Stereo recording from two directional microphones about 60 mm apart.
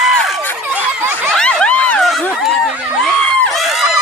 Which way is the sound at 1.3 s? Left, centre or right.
Centre.